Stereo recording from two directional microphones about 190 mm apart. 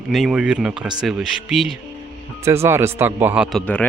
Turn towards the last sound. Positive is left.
turn(degrees=-5)  # may be behind; listen again after turning